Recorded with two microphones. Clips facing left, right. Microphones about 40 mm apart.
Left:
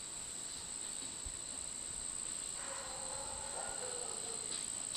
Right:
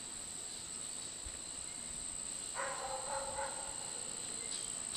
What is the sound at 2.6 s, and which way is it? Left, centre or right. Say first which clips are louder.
Bow-wow: right 6 dB; right.